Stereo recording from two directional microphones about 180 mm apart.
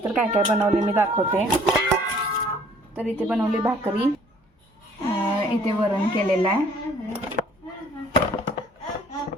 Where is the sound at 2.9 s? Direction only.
10° right (ahead or behind).